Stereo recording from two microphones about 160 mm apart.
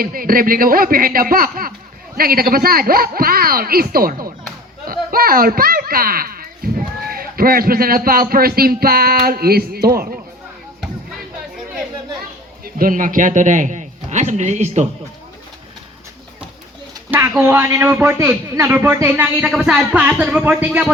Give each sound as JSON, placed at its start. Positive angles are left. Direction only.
{"t": 0.0, "sound": "speech", "side_deg": -65}
{"t": 12.6, "sound": "a man's voice", "side_deg": -60}
{"t": 17.1, "sound": "a man's voice", "side_deg": -10}